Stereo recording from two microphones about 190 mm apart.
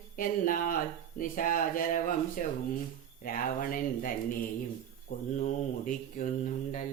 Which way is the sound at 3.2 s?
45° left (ahead or behind).